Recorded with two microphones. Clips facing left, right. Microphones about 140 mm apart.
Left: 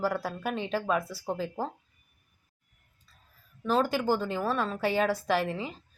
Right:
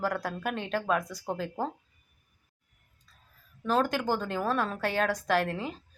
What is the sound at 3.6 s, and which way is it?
A woman's voice, 5° left (ahead or behind).